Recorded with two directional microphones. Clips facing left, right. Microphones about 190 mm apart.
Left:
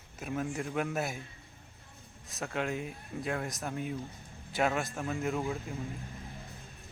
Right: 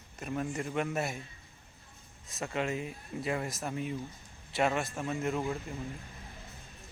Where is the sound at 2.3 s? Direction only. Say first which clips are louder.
Right 1 dB; centre (ahead or behind).